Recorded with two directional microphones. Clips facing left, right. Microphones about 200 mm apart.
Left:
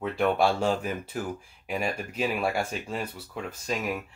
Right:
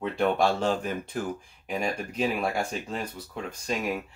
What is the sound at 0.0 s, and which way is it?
Speech, 5° left (ahead or behind).